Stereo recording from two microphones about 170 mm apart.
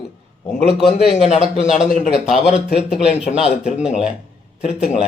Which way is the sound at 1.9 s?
55° left (ahead or behind).